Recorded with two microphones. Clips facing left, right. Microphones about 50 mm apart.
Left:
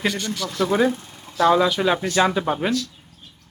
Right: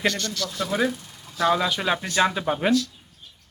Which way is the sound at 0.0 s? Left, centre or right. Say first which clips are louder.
Left 1 dB; centre.